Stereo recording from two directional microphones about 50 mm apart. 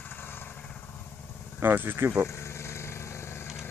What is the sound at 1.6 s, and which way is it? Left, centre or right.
Speech, right.